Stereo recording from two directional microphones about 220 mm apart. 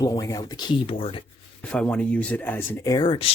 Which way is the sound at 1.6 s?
5° left (ahead or behind).